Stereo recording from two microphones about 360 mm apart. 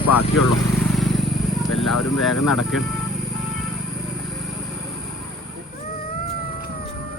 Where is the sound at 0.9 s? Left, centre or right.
Centre.